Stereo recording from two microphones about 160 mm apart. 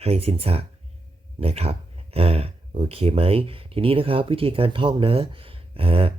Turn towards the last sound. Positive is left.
turn(degrees=-35)  # may be behind; listen again after turning